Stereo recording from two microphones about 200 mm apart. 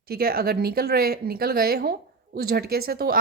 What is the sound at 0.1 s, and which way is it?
A woman's voice, 50° right (ahead or behind).